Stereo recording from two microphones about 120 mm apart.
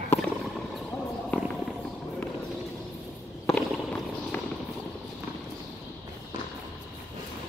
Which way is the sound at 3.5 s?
5° left (ahead or behind).